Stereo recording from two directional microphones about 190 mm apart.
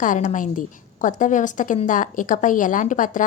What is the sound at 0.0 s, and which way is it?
A woman's voice, 40° left (ahead or behind).